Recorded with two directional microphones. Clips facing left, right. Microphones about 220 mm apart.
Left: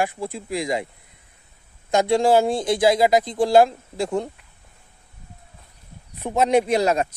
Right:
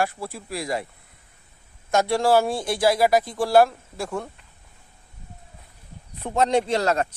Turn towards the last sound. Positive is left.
turn(degrees=10)  # may be behind; listen again after turning